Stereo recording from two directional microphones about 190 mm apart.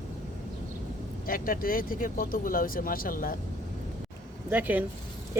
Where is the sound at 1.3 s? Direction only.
50° left (ahead or behind).